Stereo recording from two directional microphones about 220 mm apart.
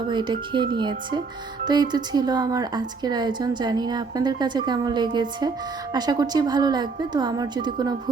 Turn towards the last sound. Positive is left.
turn(degrees=-20)  # may be behind; listen again after turning